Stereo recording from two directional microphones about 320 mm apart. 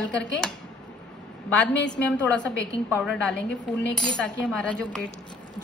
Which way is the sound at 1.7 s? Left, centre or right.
Left.